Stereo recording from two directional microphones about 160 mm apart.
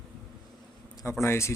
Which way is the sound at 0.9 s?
15° left (ahead or behind).